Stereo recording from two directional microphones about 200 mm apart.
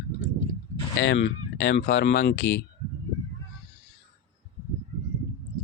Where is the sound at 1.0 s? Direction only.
65° left (ahead or behind).